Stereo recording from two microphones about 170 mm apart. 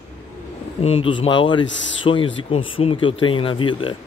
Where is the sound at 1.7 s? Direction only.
90° left.